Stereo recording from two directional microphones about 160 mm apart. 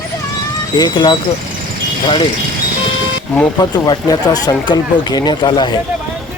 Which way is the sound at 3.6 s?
25° left (ahead or behind).